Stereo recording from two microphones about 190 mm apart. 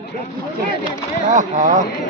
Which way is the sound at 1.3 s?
40° right (ahead or behind).